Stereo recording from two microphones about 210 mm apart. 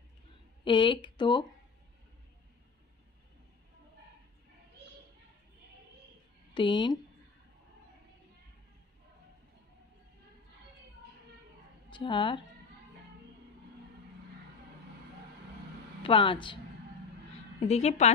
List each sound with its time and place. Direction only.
0.7 s a woman's voice: 25° left (ahead or behind)
6.5 s speech: 20° left (ahead or behind)
11.9 s a woman's voice: 20° left (ahead or behind)
16.0 s a woman's voice: 25° left (ahead or behind)
17.6 s a woman's voice: 30° left (ahead or behind)